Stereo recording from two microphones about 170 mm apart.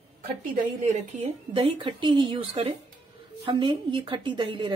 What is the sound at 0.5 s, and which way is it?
Speech, 45° right (ahead or behind).